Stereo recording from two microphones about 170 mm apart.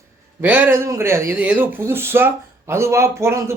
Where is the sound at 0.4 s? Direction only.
10° right (ahead or behind).